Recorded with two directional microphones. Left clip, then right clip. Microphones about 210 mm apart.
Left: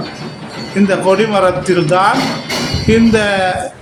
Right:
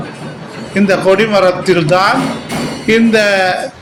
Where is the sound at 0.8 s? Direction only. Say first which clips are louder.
Right 2 dB; 10° left (ahead or behind).